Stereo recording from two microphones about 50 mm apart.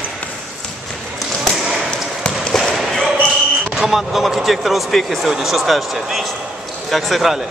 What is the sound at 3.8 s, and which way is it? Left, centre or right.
Speech, centre.